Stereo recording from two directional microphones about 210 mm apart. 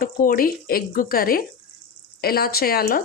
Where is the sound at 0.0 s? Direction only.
45° left (ahead or behind).